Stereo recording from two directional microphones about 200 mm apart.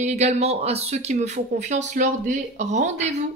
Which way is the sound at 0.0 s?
35° right (ahead or behind).